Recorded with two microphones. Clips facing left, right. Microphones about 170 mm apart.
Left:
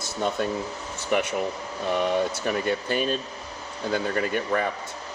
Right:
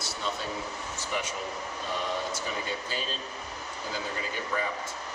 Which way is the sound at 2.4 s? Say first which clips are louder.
Left 9 dB; 60° left (ahead or behind).